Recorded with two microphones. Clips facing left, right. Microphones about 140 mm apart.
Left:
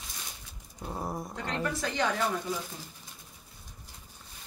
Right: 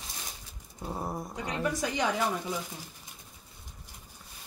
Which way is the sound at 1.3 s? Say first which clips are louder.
Right 3 dB; 15° right (ahead or behind).